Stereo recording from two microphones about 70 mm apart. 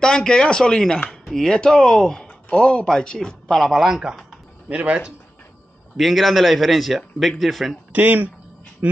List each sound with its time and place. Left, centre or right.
0.0 s speech: centre
4.6 s speech: centre
5.9 s a man's voice: centre
7.9 s speech: right